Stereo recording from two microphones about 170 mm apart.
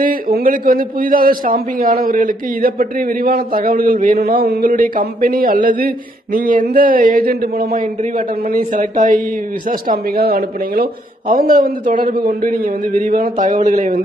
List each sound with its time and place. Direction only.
0.0 s a man's voice: 60° right (ahead or behind)
9.7 s a man's voice: 60° right (ahead or behind)